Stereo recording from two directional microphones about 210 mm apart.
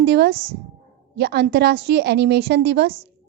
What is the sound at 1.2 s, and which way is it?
A woman's voice, 50° right (ahead or behind).